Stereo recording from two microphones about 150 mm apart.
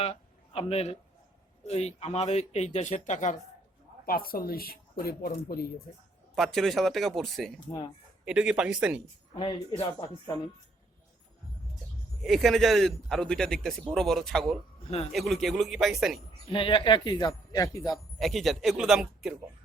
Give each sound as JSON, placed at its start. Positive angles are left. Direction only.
{"t": 0.0, "sound": "a sound", "side_deg": 40}
{"t": 1.6, "sound": "speech", "side_deg": 45}
{"t": 4.0, "sound": "speech", "side_deg": 75}
{"t": 6.3, "sound": "a man's voice", "side_deg": 0}
{"t": 12.2, "sound": "a man's voice", "side_deg": 0}
{"t": 14.8, "sound": "speech", "side_deg": 45}
{"t": 15.1, "sound": "a man's voice", "side_deg": 0}
{"t": 16.5, "sound": "speech", "side_deg": 35}
{"t": 18.2, "sound": "a man's voice", "side_deg": 0}